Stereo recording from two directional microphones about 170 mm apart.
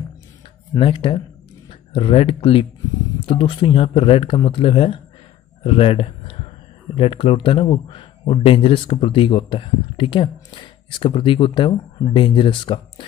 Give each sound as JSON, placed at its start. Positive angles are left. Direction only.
{"t": 0.7, "sound": "speech", "side_deg": 30}
{"t": 5.6, "sound": "a sound", "side_deg": 35}
{"t": 7.0, "sound": "speech", "side_deg": 35}